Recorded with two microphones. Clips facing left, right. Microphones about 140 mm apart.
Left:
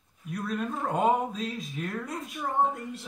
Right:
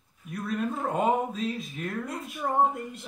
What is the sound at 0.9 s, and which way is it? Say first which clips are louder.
Speech: left 1 dB; centre (ahead or behind).